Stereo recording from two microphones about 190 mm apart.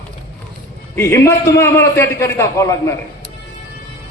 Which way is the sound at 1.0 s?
15° left (ahead or behind).